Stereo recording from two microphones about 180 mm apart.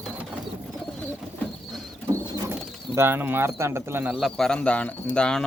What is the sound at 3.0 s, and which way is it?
Speech, 10° right (ahead or behind).